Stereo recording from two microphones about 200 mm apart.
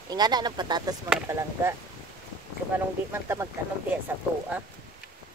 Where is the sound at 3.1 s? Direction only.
10° right (ahead or behind).